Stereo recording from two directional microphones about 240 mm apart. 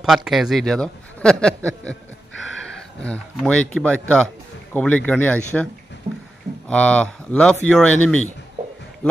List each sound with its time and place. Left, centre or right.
0.0 s a man's voice: centre
3.0 s a man's voice: centre
6.0 s a sound: right
6.7 s a man's voice: centre